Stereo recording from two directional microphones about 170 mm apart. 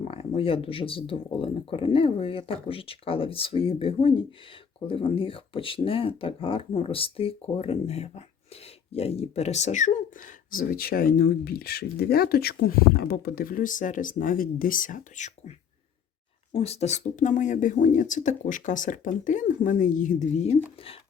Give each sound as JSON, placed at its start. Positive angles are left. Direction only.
{"t": 0.0, "sound": "speech", "side_deg": 35}